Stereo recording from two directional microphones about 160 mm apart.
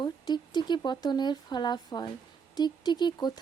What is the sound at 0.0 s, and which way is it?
Speech, 25° left (ahead or behind).